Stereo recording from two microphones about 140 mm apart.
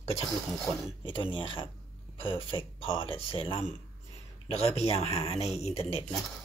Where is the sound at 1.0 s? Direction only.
35° left (ahead or behind).